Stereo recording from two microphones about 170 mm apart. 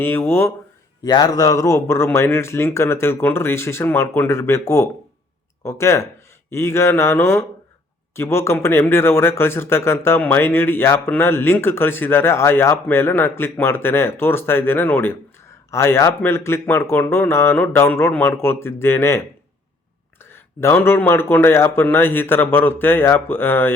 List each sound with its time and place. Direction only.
0.0 s speech: 15° left (ahead or behind)